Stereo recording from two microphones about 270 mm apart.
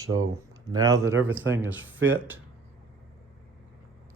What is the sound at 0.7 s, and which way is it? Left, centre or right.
Speech, centre.